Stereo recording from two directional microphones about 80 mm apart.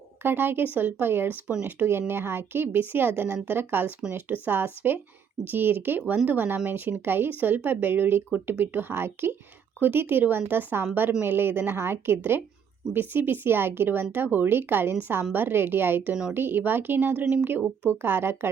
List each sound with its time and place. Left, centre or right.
0.2 s speech: right